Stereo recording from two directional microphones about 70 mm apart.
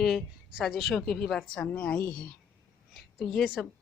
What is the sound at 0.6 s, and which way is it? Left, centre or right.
Speech, centre.